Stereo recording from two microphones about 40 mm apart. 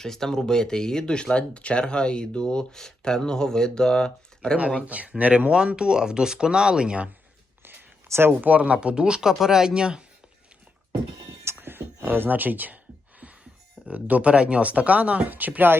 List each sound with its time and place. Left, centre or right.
0.0 s speech: centre
2.7 s speech: centre
4.9 s speech: right
5.5 s speech: right
7.6 s a sound: right
8.1 s speech: right
8.4 s speech: right; by 10.0 s centre
11.4 s a sound: right
12.0 s a sound: right
13.8 s speech: right
15.3 s speech: right